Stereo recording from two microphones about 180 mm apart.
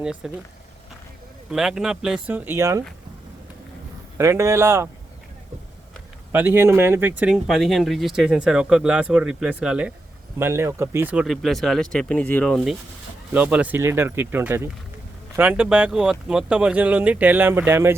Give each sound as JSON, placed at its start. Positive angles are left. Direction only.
{"t": 0.0, "sound": "speech", "side_deg": -5}
{"t": 1.5, "sound": "speech", "side_deg": -5}
{"t": 4.2, "sound": "speech", "side_deg": -15}
{"t": 6.3, "sound": "speech", "side_deg": -10}
{"t": 7.2, "sound": "speech", "side_deg": -5}
{"t": 13.3, "sound": "speech", "side_deg": -5}